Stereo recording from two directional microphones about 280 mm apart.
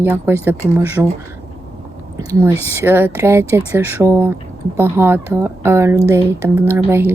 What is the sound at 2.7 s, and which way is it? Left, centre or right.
Speech, centre.